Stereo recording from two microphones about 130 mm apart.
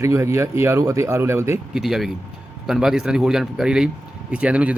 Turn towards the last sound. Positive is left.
turn(degrees=-10)  # may be behind; listen again after turning